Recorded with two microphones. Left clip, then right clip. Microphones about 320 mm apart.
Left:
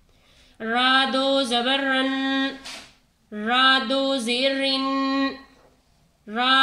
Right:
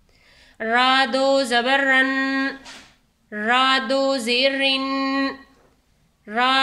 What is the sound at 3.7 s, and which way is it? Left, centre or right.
Speech, right.